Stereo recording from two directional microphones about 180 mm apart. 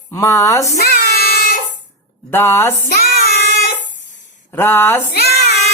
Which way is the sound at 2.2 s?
15° left (ahead or behind).